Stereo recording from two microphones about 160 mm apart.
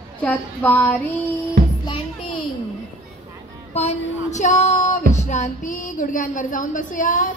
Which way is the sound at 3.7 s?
45° left (ahead or behind).